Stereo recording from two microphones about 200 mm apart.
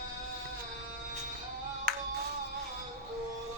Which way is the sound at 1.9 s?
45° right (ahead or behind).